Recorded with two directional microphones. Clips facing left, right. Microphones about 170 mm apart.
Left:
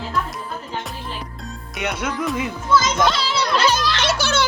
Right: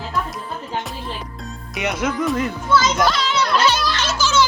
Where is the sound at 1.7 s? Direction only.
Centre (ahead or behind).